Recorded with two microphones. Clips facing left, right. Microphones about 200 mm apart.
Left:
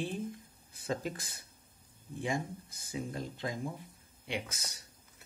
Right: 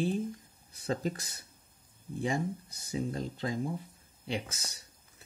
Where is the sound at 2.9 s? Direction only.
35° right (ahead or behind).